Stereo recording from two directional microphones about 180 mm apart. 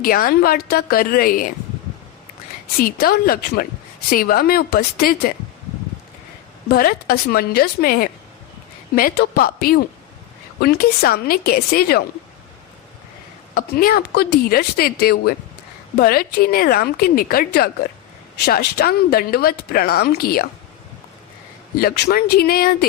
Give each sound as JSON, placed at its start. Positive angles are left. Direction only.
{"t": 0.0, "sound": "speech", "side_deg": 55}
{"t": 2.8, "sound": "speech", "side_deg": 55}
{"t": 6.7, "sound": "speech", "side_deg": 55}
{"t": 13.5, "sound": "speech", "side_deg": 55}
{"t": 21.8, "sound": "speech", "side_deg": 60}